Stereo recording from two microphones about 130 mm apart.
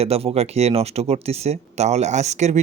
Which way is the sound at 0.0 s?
50° right (ahead or behind).